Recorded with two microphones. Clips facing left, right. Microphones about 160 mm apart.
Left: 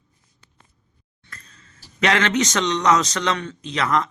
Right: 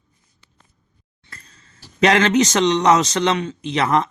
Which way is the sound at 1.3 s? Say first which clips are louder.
Even; 30° right (ahead or behind).